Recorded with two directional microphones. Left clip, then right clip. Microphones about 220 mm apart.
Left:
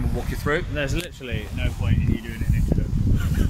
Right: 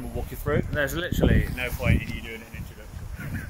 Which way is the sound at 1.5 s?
35° right (ahead or behind).